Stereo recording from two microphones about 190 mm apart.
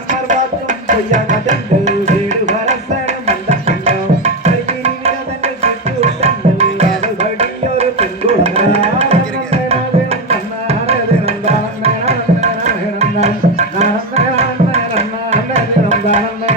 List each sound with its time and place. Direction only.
0.1 s tabla: 40° right (ahead or behind)
7.2 s music: 35° right (ahead or behind)
14.3 s tabla: 35° right (ahead or behind)